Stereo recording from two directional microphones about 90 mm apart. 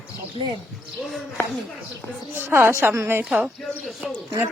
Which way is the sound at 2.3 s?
25° right (ahead or behind).